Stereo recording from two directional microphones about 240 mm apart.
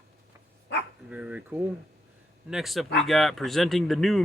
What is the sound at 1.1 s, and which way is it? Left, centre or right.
Speech, centre.